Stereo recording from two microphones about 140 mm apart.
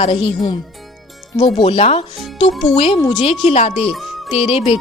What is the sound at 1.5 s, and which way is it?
Speech, 40° left (ahead or behind).